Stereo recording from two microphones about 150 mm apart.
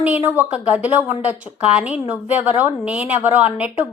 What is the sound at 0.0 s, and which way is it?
A woman's voice, 10° right (ahead or behind).